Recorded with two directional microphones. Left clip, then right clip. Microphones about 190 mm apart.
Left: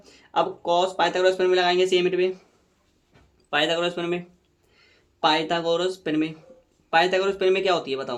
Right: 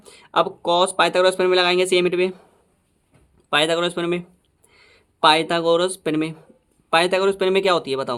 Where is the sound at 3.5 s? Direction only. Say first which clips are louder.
Right 4 dB; 30° right (ahead or behind).